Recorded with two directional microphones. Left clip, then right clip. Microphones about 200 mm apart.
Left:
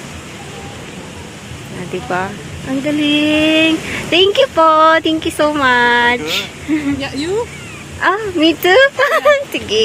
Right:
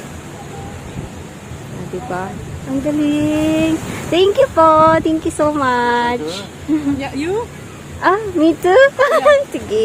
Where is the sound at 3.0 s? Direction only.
Centre (ahead or behind).